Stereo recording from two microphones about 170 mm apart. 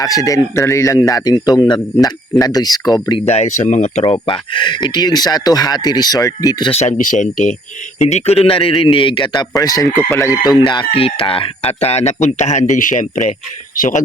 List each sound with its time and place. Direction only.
0.0 s speech: 20° left (ahead or behind)
3.2 s speech: 40° left (ahead or behind)
4.0 s speech: 30° left (ahead or behind)
7.0 s speech: 50° left (ahead or behind)